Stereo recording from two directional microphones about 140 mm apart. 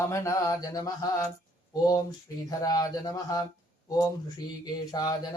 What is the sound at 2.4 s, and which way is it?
Mantra, 25° left (ahead or behind).